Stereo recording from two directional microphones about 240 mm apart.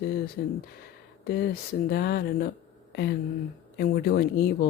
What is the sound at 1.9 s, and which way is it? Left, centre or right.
Speech, left.